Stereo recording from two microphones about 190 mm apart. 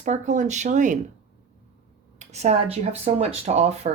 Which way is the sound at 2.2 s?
35° right (ahead or behind).